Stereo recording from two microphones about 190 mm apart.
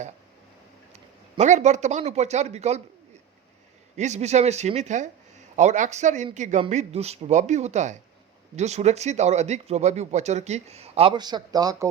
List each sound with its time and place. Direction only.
1.4 s speech: 40° right (ahead or behind)
3.9 s speech: 35° right (ahead or behind); by 11.9 s 20° right (ahead or behind)